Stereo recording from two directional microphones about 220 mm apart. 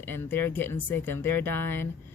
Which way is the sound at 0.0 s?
10° left (ahead or behind).